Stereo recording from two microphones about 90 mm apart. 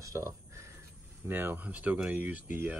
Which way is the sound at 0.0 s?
35° right (ahead or behind).